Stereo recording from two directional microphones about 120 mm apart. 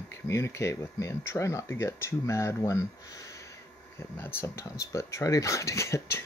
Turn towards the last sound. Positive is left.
turn(degrees=25)  # may be behind; listen again after turning